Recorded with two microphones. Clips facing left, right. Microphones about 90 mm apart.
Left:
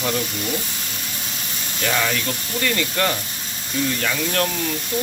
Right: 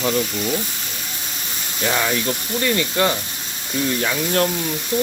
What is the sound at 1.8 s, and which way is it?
Speech, 15° right (ahead or behind).